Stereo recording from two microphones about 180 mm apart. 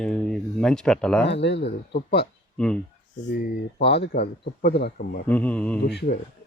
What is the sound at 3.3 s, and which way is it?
Speech, 70° left (ahead or behind).